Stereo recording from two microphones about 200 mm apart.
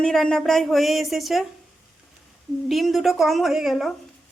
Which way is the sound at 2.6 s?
Centre (ahead or behind).